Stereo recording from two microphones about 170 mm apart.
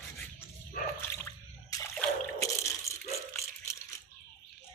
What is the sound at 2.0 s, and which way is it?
Drip, 15° left (ahead or behind).